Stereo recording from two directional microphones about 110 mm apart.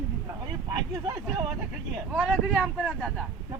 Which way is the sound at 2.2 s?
Centre (ahead or behind).